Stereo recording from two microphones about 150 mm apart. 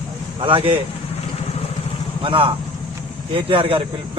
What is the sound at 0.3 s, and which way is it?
Speech, 35° right (ahead or behind).